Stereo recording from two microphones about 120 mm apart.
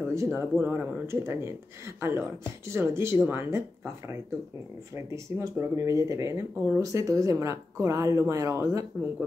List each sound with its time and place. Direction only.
0.1 s speech: 25° right (ahead or behind)